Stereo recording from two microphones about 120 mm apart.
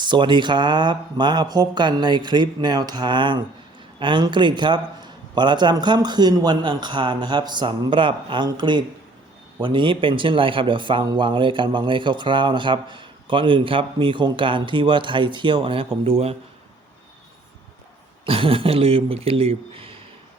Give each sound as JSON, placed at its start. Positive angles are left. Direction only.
{"t": 0.0, "sound": "a man's voice", "side_deg": -40}
{"t": 18.3, "sound": "speech", "side_deg": -50}